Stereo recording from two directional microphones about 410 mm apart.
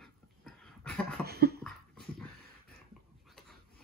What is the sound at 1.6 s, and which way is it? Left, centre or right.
Cough, centre.